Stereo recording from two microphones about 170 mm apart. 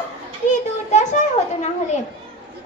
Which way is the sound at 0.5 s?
45° left (ahead or behind).